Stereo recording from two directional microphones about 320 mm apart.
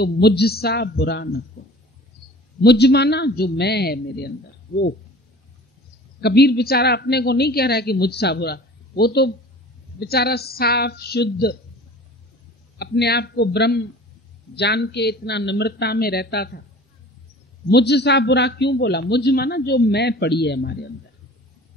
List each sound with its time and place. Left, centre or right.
0.0 s a man's voice: left
2.6 s a man's voice: left
6.2 s a man's voice: left
12.7 s a man's voice: left
17.6 s a man's voice: left